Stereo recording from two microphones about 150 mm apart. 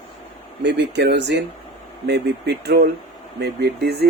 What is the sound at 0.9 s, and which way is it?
Speech, 90° right.